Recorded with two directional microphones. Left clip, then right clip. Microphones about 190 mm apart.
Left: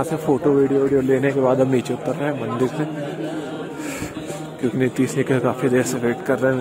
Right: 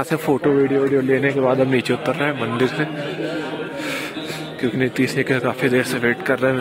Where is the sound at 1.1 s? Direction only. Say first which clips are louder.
Even; 25° left (ahead or behind).